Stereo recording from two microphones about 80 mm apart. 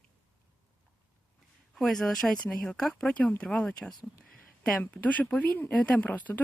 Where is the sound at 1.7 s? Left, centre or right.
Centre.